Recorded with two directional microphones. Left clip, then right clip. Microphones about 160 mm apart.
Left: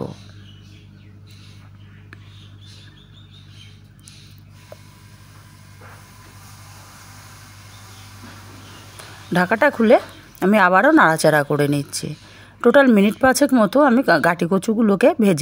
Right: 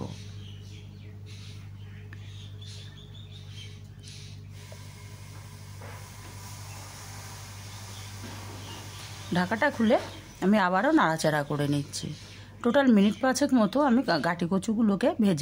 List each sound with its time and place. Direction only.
9.3 s speech: 40° left (ahead or behind)